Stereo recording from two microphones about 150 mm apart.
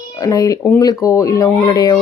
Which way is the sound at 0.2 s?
25° left (ahead or behind).